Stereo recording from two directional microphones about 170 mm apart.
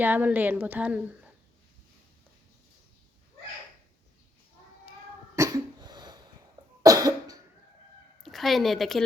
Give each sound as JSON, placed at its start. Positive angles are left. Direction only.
{"t": 0.0, "sound": "a woman's voice", "side_deg": -10}
{"t": 5.4, "sound": "cough", "side_deg": -25}
{"t": 8.2, "sound": "a woman's voice", "side_deg": 0}